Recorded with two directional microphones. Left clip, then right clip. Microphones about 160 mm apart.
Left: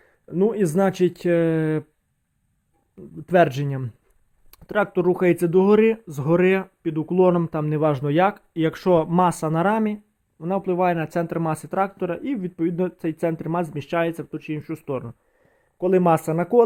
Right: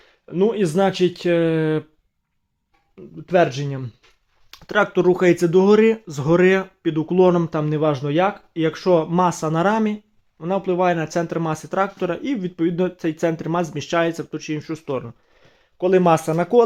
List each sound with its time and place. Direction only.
0.0 s speech: 25° left (ahead or behind)
3.2 s speech: 40° left (ahead or behind)
4.5 s speech: 10° left (ahead or behind)